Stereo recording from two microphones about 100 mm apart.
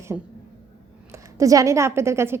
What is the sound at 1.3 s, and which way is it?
A woman's voice, 35° right (ahead or behind).